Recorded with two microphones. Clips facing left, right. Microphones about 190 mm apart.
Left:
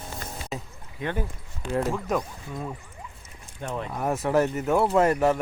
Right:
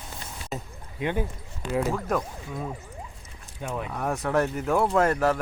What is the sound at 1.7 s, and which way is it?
Speech, centre (ahead or behind).